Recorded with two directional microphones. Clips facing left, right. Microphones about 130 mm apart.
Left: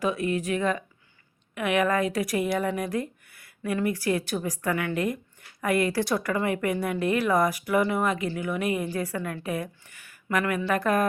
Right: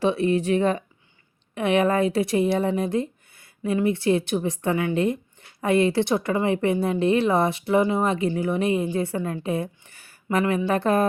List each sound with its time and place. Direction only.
0.0 s speech: 30° right (ahead or behind)